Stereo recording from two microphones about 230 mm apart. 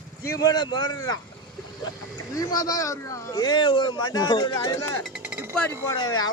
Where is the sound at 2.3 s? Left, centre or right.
Centre.